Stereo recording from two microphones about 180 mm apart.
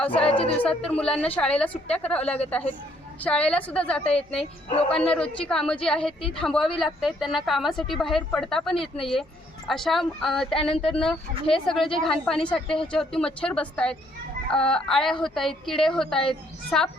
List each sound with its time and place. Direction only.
0.0 s a woman's voice: 5° left (ahead or behind)
0.3 s speech: 30° left (ahead or behind)
0.5 s a woman's voice: 10° left (ahead or behind)